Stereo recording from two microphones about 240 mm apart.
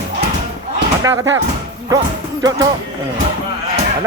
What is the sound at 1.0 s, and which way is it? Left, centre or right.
Speech, centre.